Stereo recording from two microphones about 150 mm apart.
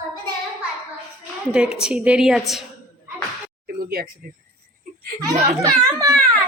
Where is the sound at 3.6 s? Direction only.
90° right.